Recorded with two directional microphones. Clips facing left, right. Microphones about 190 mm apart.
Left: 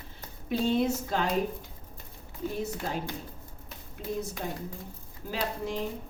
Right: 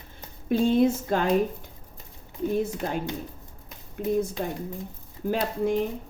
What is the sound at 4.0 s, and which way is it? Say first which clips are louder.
Speech: right 8 dB; 55° right (ahead or behind).